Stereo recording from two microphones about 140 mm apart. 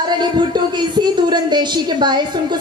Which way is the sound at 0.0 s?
30° right (ahead or behind).